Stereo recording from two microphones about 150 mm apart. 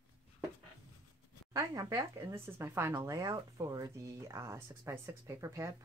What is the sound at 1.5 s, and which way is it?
Speech, 20° right (ahead or behind).